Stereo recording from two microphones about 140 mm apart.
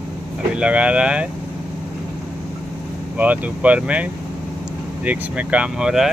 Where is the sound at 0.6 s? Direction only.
10° right (ahead or behind).